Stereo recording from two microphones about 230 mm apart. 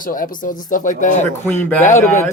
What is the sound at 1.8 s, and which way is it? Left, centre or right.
Speech, left.